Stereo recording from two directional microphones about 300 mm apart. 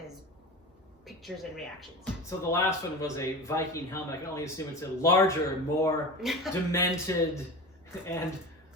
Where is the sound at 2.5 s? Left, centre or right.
Centre.